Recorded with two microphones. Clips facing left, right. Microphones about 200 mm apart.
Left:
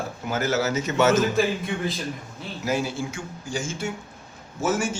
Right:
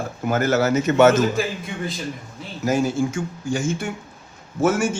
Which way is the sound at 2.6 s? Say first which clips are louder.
Right 6 dB; 45° right (ahead or behind).